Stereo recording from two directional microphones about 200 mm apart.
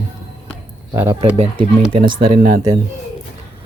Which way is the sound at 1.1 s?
30° right (ahead or behind).